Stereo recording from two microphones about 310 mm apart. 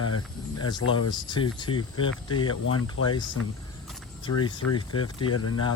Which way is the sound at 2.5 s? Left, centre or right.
Left.